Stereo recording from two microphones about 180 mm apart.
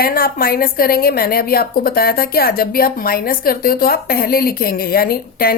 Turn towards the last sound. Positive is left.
turn(degrees=55)  # may be behind; listen again after turning